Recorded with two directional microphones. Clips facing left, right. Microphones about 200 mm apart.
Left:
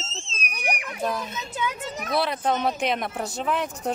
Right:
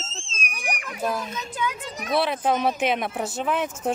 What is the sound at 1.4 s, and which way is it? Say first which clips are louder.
Speech: right 1 dB; 20° left (ahead or behind).